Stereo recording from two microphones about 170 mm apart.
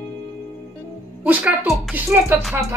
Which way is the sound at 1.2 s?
5° right (ahead or behind).